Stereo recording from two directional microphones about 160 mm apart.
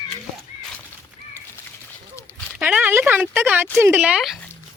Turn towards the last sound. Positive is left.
turn(degrees=-5)  # may be behind; listen again after turning